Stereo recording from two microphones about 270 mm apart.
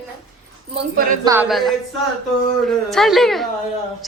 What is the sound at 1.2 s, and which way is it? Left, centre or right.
Speech, centre.